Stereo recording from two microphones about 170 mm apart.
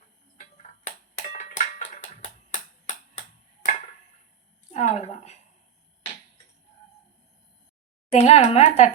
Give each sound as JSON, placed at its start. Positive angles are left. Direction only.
{"t": 0.5, "sound": "a sound", "side_deg": 45}
{"t": 4.7, "sound": "a woman's voice", "side_deg": 40}
{"t": 8.1, "sound": "speech", "side_deg": 40}